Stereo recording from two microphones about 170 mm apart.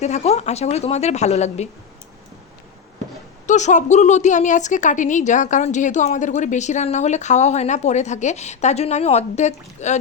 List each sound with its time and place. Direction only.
0.0 s a woman's voice: 40° left (ahead or behind)
3.4 s a woman's voice: 45° left (ahead or behind)